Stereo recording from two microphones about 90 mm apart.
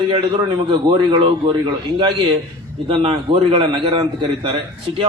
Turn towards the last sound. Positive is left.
turn(degrees=-70)  # may be behind; listen again after turning